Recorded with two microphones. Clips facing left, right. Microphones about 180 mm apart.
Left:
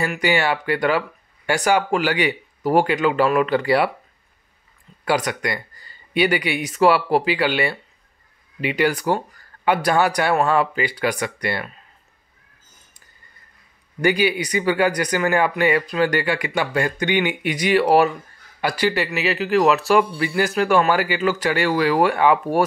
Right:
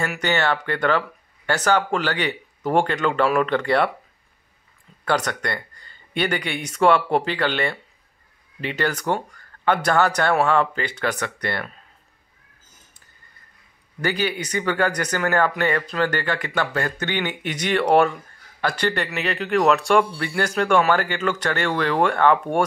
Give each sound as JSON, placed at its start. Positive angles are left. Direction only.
{"t": 0.2, "sound": "speech", "side_deg": 10}
{"t": 5.0, "sound": "speech", "side_deg": 10}
{"t": 14.0, "sound": "speech", "side_deg": 10}